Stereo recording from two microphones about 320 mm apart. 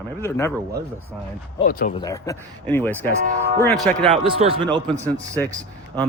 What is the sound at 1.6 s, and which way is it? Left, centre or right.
Speech, left.